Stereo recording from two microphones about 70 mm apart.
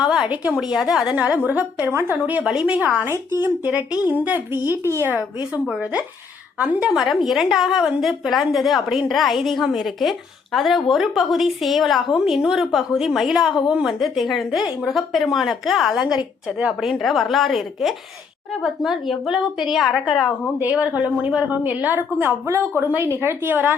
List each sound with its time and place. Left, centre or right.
0.0 s a woman's voice: centre
1.5 s a woman's voice: right
2.4 s a woman's voice: centre
3.0 s a woman's voice: right
3.6 s a woman's voice: right
5.6 s a woman's voice: centre
16.8 s a woman's voice: centre
20.6 s a woman's voice: right